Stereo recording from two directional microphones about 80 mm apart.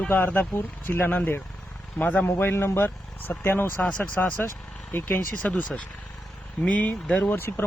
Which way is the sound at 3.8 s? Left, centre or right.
Centre.